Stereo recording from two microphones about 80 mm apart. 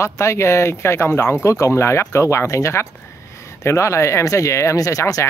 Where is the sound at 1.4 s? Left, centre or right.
Left.